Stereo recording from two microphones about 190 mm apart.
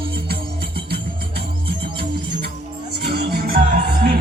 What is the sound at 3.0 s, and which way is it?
Music, 55° right (ahead or behind).